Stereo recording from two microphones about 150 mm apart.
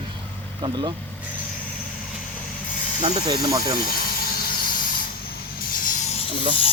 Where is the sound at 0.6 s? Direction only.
30° right (ahead or behind).